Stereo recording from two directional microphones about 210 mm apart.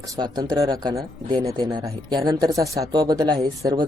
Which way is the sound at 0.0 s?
20° right (ahead or behind).